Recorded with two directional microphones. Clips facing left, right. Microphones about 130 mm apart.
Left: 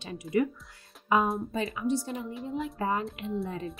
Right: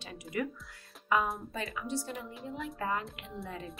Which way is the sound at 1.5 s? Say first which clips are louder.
Left 7 dB; 25° left (ahead or behind).